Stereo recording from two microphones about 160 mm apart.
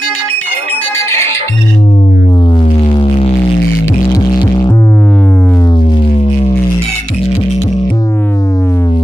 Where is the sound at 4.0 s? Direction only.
25° left (ahead or behind).